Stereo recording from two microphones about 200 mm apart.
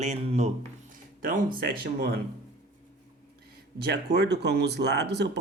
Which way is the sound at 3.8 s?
55° right (ahead or behind).